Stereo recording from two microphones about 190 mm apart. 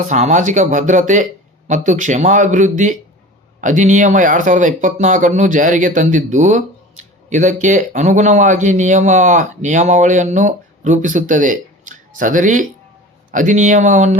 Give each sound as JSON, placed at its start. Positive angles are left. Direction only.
{"t": 0.0, "sound": "speech", "side_deg": -40}